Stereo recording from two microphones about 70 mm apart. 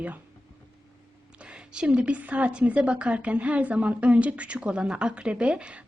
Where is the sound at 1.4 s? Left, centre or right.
Centre.